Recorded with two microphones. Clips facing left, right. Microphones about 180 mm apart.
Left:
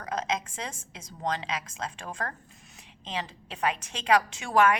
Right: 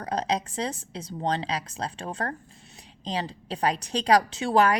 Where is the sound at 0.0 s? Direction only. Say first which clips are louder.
Right 4 dB; 35° right (ahead or behind).